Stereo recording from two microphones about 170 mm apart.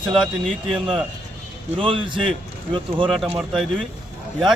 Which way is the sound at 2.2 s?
5° left (ahead or behind).